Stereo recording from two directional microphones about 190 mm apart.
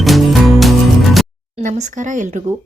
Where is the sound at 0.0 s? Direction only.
Centre (ahead or behind).